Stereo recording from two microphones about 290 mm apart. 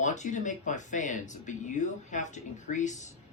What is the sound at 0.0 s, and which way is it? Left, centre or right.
Speech, left.